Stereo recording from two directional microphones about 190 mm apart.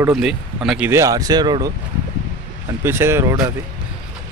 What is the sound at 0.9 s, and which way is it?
Speech, 15° right (ahead or behind).